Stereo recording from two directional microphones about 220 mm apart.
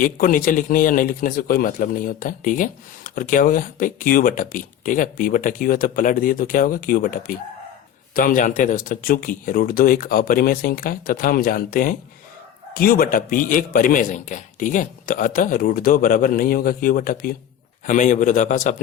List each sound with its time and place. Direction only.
0.0 s a man's voice: 40° left (ahead or behind)